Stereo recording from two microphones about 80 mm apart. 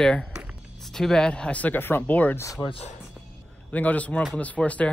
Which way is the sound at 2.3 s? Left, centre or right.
Left.